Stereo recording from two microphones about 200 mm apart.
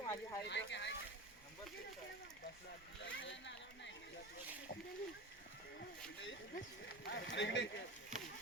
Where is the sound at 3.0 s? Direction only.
65° left (ahead or behind).